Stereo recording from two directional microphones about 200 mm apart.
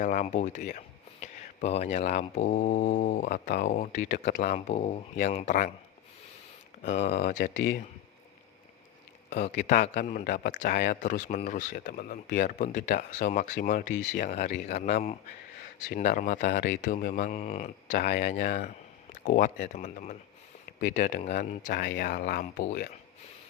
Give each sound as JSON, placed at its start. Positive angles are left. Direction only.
{"t": 0.0, "sound": "speech", "side_deg": 40}
{"t": 7.0, "sound": "speech", "side_deg": 55}
{"t": 9.3, "sound": "speech", "side_deg": 35}
{"t": 13.9, "sound": "speech", "side_deg": 70}
{"t": 14.2, "sound": "speech", "side_deg": 35}
{"t": 21.7, "sound": "speech", "side_deg": 50}